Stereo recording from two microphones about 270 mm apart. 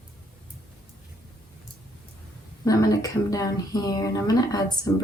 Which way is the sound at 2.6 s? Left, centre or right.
Centre.